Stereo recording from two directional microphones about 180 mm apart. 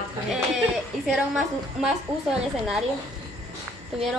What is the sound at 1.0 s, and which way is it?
A woman's voice, centre (ahead or behind).